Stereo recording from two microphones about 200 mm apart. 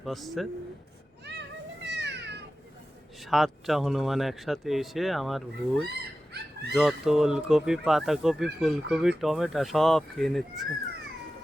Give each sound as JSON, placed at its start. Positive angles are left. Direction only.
{"t": 0.0, "sound": "speech", "side_deg": 0}
{"t": 1.2, "sound": "children playing", "side_deg": -60}
{"t": 3.2, "sound": "speech", "side_deg": 0}
{"t": 6.3, "sound": "a sound", "side_deg": -55}
{"t": 6.7, "sound": "speech", "side_deg": 0}